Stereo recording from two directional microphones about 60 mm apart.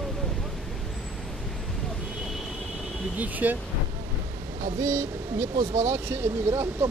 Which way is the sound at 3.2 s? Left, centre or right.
Right.